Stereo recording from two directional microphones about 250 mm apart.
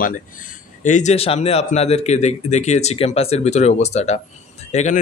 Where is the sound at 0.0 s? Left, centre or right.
Left.